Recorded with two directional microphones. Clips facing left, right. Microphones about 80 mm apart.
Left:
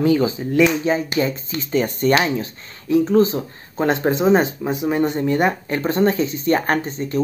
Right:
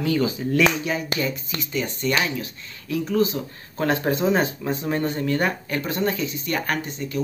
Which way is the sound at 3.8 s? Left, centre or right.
Left.